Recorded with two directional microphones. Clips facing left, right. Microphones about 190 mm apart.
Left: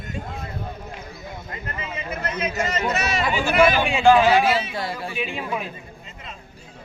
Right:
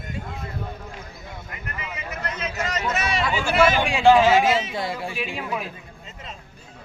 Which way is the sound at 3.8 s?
Centre (ahead or behind).